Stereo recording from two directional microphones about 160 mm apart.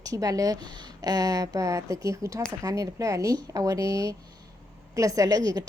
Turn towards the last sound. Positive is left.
turn(degrees=-25)  # may be behind; listen again after turning